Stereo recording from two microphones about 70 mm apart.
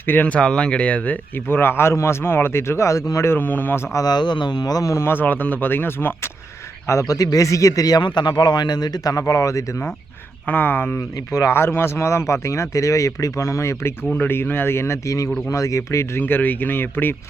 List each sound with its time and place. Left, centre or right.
0.1 s speech: left
0.3 s speech: centre; by 3.3 s left
3.3 s speech: left
3.9 s a man's voice: left
5.0 s speech: left
6.8 s speech: left
10.4 s speech: left
11.3 s speech: left
14.1 s speech: left
16.2 s speech: left